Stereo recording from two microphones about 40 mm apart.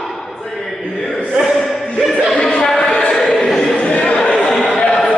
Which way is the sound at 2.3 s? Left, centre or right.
Centre.